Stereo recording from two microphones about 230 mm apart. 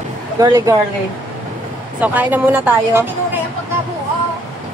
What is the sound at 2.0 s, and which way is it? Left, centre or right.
Speech, centre.